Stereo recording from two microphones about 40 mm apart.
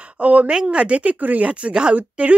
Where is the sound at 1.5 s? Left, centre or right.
Right.